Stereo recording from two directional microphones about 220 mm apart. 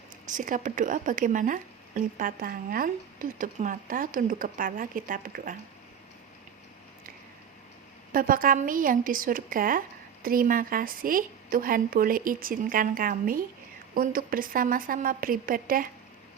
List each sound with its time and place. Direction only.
0.3 s a woman's voice: 35° right (ahead or behind)
8.1 s a woman's voice: 40° right (ahead or behind)